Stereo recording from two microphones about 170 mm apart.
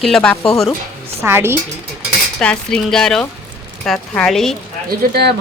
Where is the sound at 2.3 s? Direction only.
5° left (ahead or behind).